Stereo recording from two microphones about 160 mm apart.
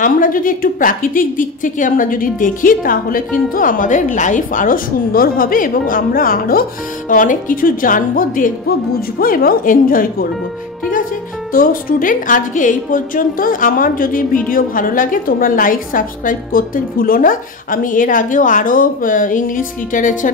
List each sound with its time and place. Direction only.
0.0 s a woman's voice: 60° left (ahead or behind)
11.5 s a woman's voice: 60° left (ahead or behind)